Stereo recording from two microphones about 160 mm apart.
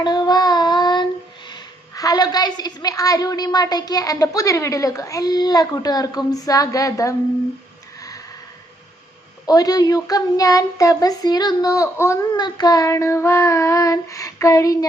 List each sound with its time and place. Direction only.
0.0 s child singing: 25° left (ahead or behind)
1.5 s a woman's voice: 25° left (ahead or behind)
9.5 s a woman's voice: 25° left (ahead or behind)